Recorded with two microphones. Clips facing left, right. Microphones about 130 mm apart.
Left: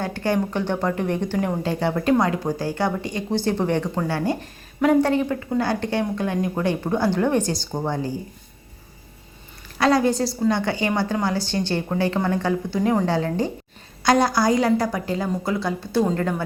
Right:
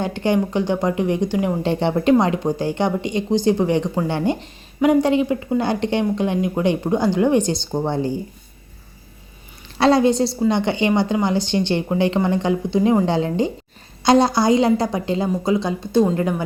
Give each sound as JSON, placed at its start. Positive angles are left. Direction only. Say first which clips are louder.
{"t": 0.0, "sound": "a woman's voice", "louder": "right 3 dB", "side_deg": -20}
{"t": 1.6, "sound": "a woman's voice", "louder": "right 6 dB", "side_deg": -25}
{"t": 9.7, "sound": "a woman's voice", "louder": "right 4 dB", "side_deg": -25}